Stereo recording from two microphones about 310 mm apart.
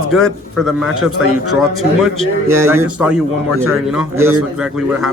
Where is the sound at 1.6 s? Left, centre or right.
Centre.